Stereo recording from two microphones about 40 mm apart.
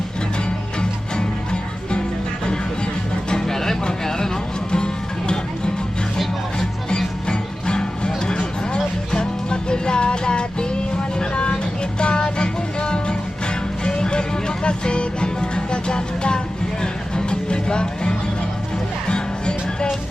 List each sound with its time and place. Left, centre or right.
3.2 s music: centre
7.3 s music: left
11.2 s vehicle: left
11.9 s music: left